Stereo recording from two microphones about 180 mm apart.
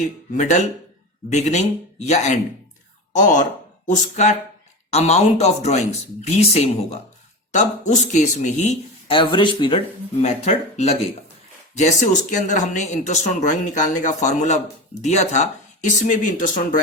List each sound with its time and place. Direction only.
0.0 s speech: 40° left (ahead or behind)
9.1 s speech: 25° left (ahead or behind)
10.2 s speech: 40° left (ahead or behind)
12.3 s speech: 40° left (ahead or behind)